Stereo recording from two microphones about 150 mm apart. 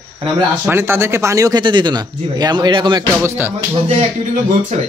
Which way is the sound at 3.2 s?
15° right (ahead or behind).